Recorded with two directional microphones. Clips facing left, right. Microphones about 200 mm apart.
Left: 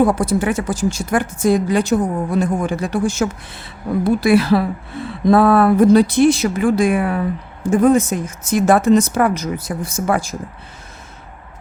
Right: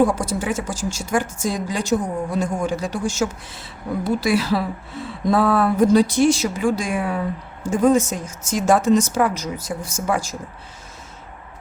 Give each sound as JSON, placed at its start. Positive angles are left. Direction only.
{"t": 0.0, "sound": "a woman's voice", "side_deg": 60}